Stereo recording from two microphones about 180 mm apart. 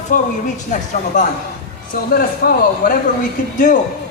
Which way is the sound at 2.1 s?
55° left (ahead or behind).